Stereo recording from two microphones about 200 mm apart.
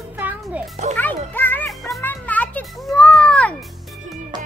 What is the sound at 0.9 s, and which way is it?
Music, 10° left (ahead or behind).